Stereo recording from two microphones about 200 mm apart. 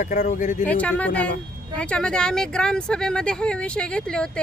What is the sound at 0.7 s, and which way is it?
Speech, 5° left (ahead or behind).